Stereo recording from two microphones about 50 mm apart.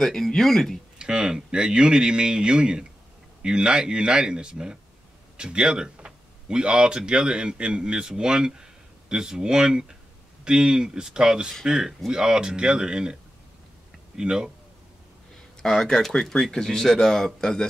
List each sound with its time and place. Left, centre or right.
0.0 s speech: centre
0.9 s speech: centre
15.3 s speech: centre